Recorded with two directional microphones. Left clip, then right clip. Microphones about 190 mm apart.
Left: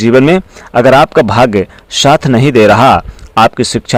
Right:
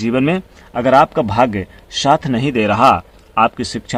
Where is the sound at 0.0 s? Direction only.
40° left (ahead or behind).